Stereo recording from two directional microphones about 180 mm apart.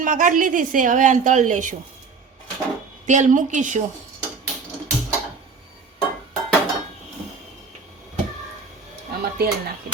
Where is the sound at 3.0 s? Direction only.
45° right (ahead or behind).